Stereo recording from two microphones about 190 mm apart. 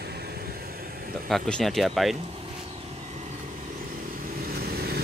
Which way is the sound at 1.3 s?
Centre (ahead or behind).